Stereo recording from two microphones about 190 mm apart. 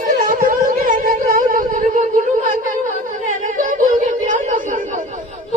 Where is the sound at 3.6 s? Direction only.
40° right (ahead or behind).